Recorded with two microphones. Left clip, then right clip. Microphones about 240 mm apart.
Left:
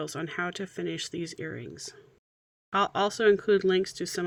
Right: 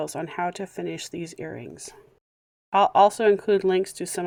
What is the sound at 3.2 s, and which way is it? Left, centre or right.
Speech, right.